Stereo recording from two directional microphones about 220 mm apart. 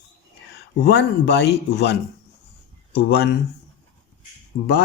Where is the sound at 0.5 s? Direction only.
50° left (ahead or behind).